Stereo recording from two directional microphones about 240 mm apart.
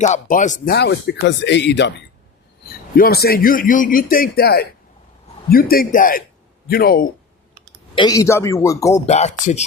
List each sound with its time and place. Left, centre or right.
0.0 s speech: left
2.9 s a man's voice: left
7.9 s a man's voice: centre
9.0 s speech: left